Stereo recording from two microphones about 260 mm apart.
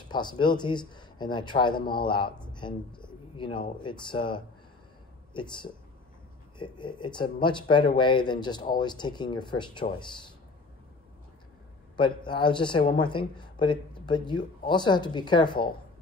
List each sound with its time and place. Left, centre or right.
0.1 s speech: centre
12.0 s speech: centre